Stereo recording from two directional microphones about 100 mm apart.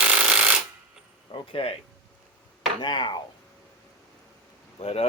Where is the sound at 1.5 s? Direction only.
65° left (ahead or behind).